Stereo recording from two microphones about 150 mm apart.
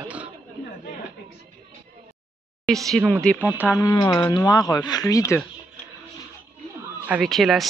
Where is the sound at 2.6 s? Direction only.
Centre (ahead or behind).